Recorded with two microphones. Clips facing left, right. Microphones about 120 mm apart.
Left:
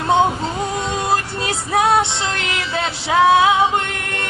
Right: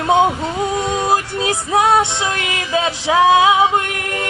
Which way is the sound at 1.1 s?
15° right (ahead or behind).